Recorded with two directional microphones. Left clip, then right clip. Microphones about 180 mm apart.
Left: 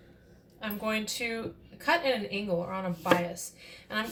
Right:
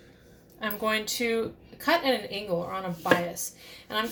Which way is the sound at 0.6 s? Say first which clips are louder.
Right 4 dB; 45° right (ahead or behind).